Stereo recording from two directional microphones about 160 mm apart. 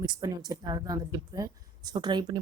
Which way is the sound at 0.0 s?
25° right (ahead or behind).